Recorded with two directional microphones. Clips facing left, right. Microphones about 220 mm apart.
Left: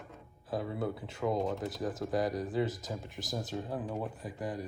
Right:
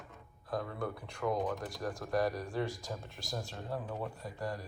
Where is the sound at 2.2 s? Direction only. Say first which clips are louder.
Left 2 dB; 20° left (ahead or behind).